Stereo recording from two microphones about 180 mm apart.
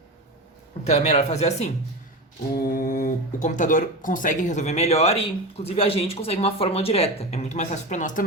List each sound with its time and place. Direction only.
0.9 s speech: 40° left (ahead or behind)
2.5 s speech: 55° left (ahead or behind)